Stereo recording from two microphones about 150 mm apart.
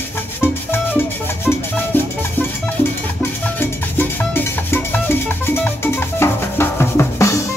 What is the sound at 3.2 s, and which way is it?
Cowbell, 15° left (ahead or behind).